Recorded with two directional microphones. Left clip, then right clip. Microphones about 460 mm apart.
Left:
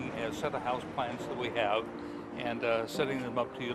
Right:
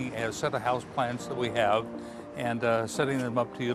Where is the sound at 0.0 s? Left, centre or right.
Right.